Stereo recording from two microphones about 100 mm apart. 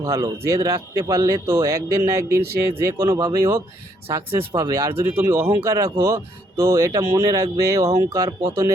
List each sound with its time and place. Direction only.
0.0 s speech: 30° right (ahead or behind)